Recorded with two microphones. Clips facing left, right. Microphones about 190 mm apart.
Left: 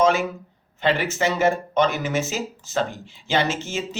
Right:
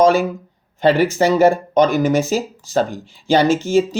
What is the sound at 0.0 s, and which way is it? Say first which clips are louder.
Speech: right 6 dB; 35° right (ahead or behind).